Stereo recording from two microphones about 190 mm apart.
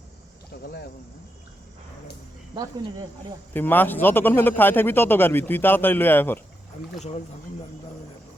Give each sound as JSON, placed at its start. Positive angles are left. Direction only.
{"t": 0.6, "sound": "speech", "side_deg": 55}
{"t": 3.5, "sound": "a man's voice", "side_deg": 10}